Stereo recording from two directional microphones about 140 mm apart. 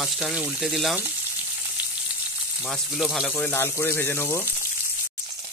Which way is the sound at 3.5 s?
20° left (ahead or behind).